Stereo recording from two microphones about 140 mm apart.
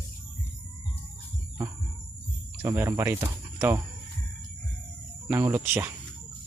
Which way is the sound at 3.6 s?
15° right (ahead or behind).